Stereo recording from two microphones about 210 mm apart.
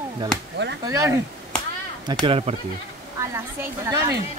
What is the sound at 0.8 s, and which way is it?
Speech, 15° right (ahead or behind).